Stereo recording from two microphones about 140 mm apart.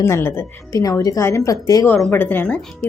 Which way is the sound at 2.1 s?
15° left (ahead or behind).